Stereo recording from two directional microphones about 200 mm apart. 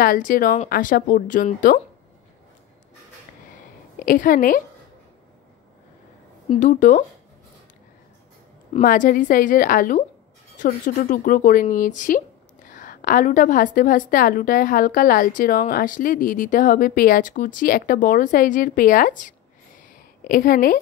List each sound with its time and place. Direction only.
0.0 s a woman's voice: 45° left (ahead or behind)
4.0 s a woman's voice: 45° left (ahead or behind)
6.6 s speech: 40° left (ahead or behind)
8.7 s a woman's voice: 40° left (ahead or behind)